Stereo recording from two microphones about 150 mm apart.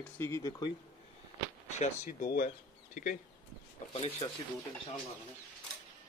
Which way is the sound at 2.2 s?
80° left.